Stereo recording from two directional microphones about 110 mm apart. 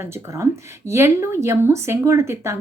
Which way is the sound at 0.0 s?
25° right (ahead or behind).